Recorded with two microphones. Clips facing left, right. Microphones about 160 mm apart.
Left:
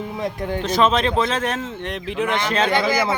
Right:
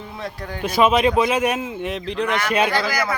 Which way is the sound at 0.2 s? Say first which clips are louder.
Left 6 dB; 20° left (ahead or behind).